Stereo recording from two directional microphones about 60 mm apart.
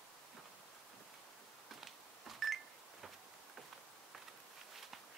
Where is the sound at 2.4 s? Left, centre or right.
Centre.